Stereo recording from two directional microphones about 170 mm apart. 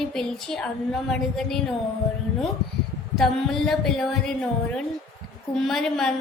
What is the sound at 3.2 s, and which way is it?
A woman's voice, centre (ahead or behind).